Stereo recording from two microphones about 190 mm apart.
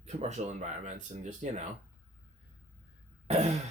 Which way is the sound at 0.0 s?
35° right (ahead or behind).